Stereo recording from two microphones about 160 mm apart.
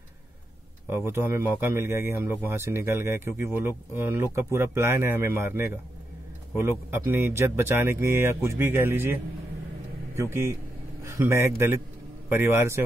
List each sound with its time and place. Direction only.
0.8 s speech: 15° right (ahead or behind)
10.3 s speech: 15° right (ahead or behind)